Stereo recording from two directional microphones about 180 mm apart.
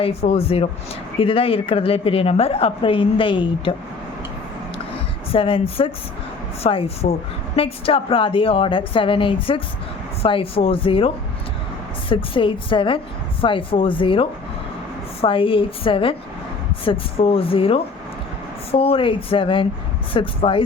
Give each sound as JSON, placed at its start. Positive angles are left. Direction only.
{"t": 0.0, "sound": "a woman's voice", "side_deg": 35}
{"t": 5.3, "sound": "a woman's voice", "side_deg": 30}